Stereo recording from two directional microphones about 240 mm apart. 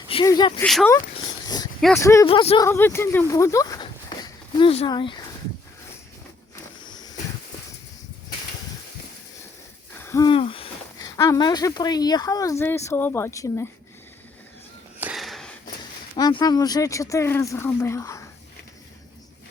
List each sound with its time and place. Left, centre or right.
0.1 s speech: centre
0.6 s speech: centre
0.9 s dog: centre
2.0 s speech: centre
2.6 s speech: centre
6.8 s a sound: centre
10.0 s speech: centre
14.9 s a sound: centre
16.1 s speech: centre